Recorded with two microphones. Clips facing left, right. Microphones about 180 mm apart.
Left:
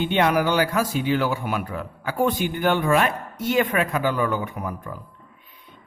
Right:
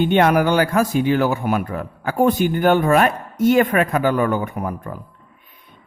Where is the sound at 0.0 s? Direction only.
50° right (ahead or behind).